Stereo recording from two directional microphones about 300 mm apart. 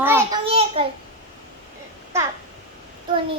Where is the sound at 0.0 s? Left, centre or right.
Centre.